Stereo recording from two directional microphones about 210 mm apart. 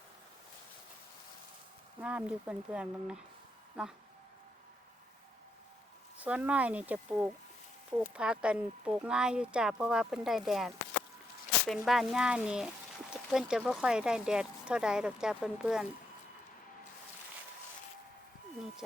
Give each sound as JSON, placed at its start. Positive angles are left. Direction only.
{"t": 2.0, "sound": "speech", "side_deg": -5}
{"t": 6.1, "sound": "speech", "side_deg": -5}
{"t": 11.7, "sound": "speech", "side_deg": 0}